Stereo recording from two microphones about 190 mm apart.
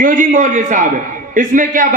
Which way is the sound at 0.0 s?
45° right (ahead or behind).